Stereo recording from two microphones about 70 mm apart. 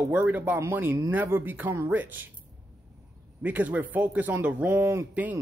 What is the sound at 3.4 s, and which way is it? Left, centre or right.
Speech, right.